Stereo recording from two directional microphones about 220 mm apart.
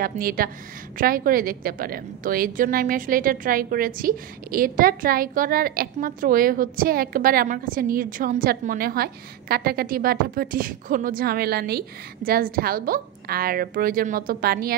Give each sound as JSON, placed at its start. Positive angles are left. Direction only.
{"t": 0.0, "sound": "a woman's voice", "side_deg": -40}